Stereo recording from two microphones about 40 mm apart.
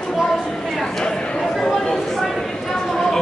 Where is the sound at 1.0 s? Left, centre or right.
Centre.